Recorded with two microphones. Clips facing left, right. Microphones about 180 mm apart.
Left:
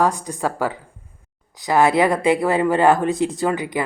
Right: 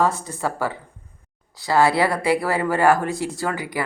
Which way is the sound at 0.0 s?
15° left (ahead or behind).